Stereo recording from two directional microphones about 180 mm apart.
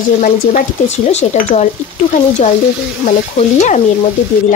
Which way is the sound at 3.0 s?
40° left (ahead or behind).